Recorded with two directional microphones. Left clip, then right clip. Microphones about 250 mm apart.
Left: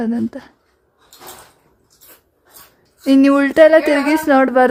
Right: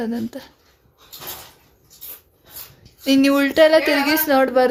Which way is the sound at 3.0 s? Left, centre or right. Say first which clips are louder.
Left 4 dB; centre.